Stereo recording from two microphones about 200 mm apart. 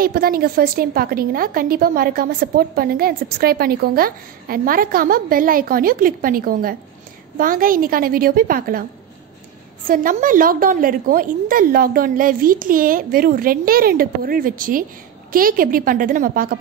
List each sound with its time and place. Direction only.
0.0 s a woman's voice: 45° right (ahead or behind)
9.8 s a woman's voice: 45° right (ahead or behind)